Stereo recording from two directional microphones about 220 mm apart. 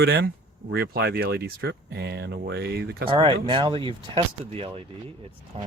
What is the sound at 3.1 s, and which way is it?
Speech, 20° right (ahead or behind).